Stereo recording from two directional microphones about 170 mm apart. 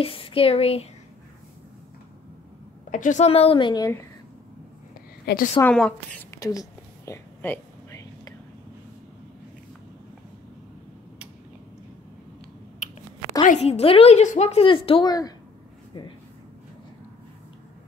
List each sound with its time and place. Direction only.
0.0 s a woman's voice: 30° left (ahead or behind)
2.9 s a woman's voice: 45° left (ahead or behind); by 4.0 s 20° left (ahead or behind)
5.2 s a woman's voice: 65° left (ahead or behind)
5.6 s a woman's voice: 5° left (ahead or behind)
6.4 s a sound: 20° left (ahead or behind)
13.4 s a woman's voice: 40° left (ahead or behind); by 15.3 s 25° left (ahead or behind)